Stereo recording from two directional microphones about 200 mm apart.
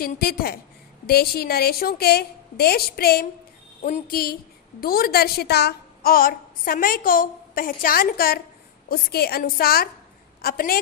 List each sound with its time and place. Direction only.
0.0 s a woman's voice: 50° left (ahead or behind)